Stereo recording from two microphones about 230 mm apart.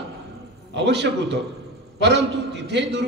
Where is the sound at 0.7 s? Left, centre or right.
Right.